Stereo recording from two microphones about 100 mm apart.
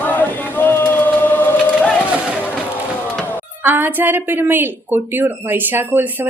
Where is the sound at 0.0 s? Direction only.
15° left (ahead or behind).